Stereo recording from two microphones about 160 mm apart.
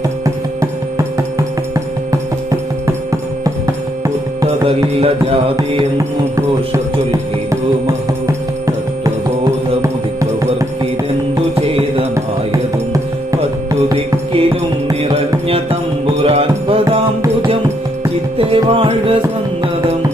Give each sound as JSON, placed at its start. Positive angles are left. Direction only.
{"t": 0.6, "sound": "music", "side_deg": -20}
{"t": 4.9, "sound": "music", "side_deg": -35}
{"t": 5.5, "sound": "music", "side_deg": -20}
{"t": 7.5, "sound": "music", "side_deg": -20}
{"t": 11.7, "sound": "music", "side_deg": -35}
{"t": 12.7, "sound": "music", "side_deg": -20}
{"t": 13.9, "sound": "music", "side_deg": -40}
{"t": 16.1, "sound": "music", "side_deg": -40}
{"t": 18.3, "sound": "music", "side_deg": -35}